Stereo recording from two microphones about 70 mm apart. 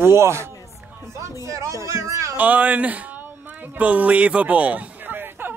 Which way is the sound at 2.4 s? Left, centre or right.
Right.